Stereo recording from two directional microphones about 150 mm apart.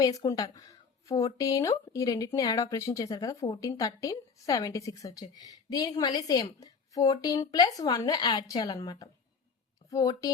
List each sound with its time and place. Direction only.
0.2 s speech: 25° left (ahead or behind)